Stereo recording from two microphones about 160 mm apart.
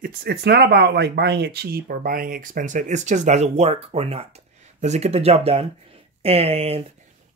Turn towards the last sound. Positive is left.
turn(degrees=-40)  # may be behind; listen again after turning